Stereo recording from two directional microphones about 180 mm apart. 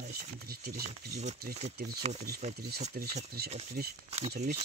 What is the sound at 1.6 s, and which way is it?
Speech, 35° right (ahead or behind).